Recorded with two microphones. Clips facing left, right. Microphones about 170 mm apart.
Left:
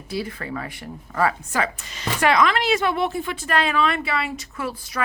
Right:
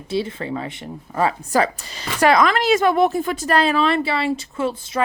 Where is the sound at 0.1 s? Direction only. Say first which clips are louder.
Right 5 dB; 25° right (ahead or behind).